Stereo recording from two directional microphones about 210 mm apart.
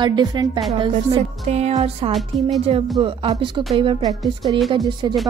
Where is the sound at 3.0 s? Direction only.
25° right (ahead or behind).